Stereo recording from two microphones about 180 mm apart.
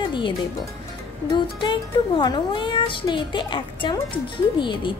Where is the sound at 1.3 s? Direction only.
25° left (ahead or behind).